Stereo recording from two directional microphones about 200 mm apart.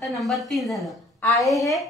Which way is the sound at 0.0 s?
Centre (ahead or behind).